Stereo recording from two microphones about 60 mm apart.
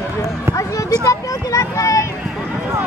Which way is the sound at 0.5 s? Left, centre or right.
Left.